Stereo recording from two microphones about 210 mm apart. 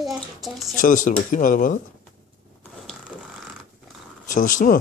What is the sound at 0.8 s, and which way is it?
Speech, 40° left (ahead or behind).